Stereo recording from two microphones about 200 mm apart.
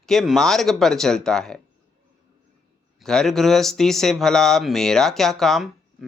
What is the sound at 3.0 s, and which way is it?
Speech, centre (ahead or behind).